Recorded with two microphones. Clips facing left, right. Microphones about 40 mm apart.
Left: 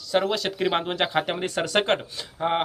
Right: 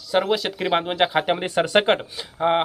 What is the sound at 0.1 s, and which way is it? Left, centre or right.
Speech, centre.